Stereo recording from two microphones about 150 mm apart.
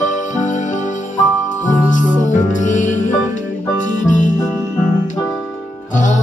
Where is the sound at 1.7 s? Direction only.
55° left (ahead or behind).